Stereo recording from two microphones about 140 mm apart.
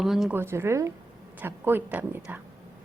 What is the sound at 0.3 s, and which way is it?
A woman's voice, 15° right (ahead or behind).